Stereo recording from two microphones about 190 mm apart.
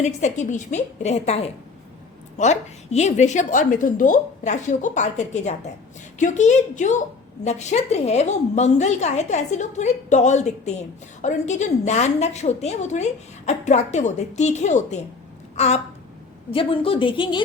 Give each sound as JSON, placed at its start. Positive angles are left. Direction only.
{"t": 0.0, "sound": "a woman's voice", "side_deg": 40}
{"t": 15.5, "sound": "a sound", "side_deg": 35}
{"t": 16.5, "sound": "a woman's voice", "side_deg": 30}